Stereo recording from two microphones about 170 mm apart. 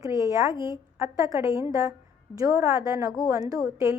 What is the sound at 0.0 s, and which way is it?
A woman's voice, 20° right (ahead or behind).